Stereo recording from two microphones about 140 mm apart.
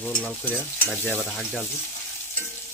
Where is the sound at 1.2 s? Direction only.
5° right (ahead or behind).